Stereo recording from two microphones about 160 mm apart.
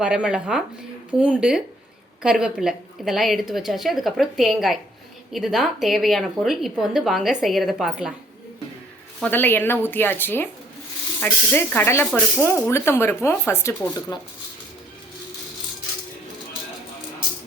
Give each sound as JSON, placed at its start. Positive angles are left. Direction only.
{"t": 0.0, "sound": "speech", "side_deg": -5}
{"t": 9.2, "sound": "speech", "side_deg": 10}